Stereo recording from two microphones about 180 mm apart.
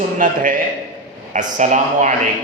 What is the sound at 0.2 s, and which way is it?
A man's voice, 45° right (ahead or behind).